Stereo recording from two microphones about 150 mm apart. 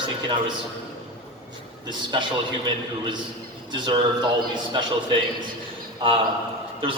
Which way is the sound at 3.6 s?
30° right (ahead or behind).